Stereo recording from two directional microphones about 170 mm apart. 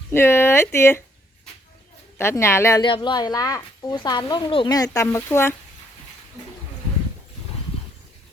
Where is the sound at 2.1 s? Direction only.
15° left (ahead or behind).